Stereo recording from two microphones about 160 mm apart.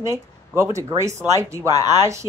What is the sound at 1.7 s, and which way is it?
Speech, 25° left (ahead or behind).